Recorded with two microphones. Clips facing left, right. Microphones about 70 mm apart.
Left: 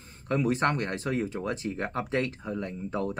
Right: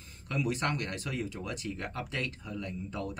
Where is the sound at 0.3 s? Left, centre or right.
Left.